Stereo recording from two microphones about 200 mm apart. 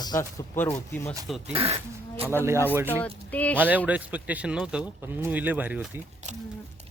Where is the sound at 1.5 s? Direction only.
30° right (ahead or behind).